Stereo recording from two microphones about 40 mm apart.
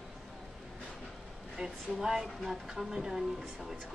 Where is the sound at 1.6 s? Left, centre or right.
Right.